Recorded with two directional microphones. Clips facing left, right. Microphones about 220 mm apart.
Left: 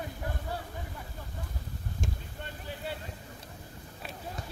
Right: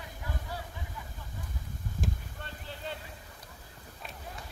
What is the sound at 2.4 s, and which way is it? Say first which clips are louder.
Boat: left 3 dB; 15° left (ahead or behind).